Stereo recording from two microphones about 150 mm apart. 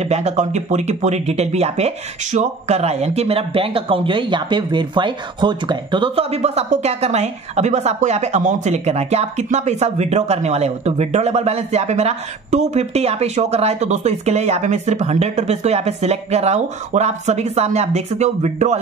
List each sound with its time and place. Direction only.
0.0 s speech: 50° right (ahead or behind)